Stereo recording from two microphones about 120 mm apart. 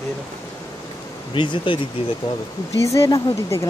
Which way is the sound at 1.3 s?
40° left (ahead or behind).